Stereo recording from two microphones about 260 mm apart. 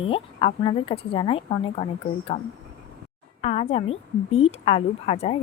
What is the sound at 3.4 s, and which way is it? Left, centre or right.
Speech, left.